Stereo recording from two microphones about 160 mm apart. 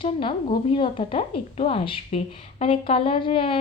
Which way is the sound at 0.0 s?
35° left (ahead or behind).